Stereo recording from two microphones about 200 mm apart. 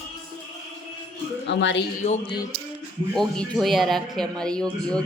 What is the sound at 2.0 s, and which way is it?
Music, 35° left (ahead or behind).